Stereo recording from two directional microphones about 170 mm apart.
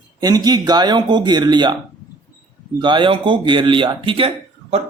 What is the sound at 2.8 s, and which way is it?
Speech, 30° right (ahead or behind).